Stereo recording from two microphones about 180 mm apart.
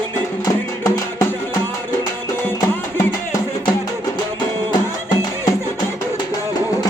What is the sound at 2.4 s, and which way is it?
Music, 15° left (ahead or behind).